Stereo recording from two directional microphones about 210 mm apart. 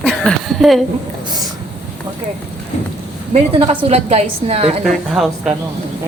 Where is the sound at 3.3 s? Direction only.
25° right (ahead or behind).